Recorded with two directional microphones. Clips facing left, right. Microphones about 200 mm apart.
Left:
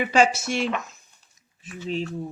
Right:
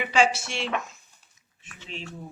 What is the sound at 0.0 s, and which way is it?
Speech, 45° left (ahead or behind).